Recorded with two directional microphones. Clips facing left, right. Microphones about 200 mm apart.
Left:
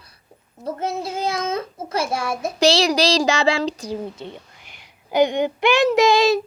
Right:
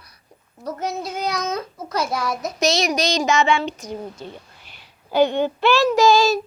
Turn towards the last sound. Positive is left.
turn(degrees=20)  # may be behind; listen again after turning